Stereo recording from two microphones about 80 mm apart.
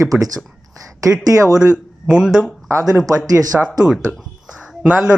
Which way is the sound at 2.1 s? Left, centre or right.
Centre.